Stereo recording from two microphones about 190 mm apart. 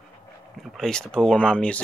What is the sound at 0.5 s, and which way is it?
Speech, centre (ahead or behind).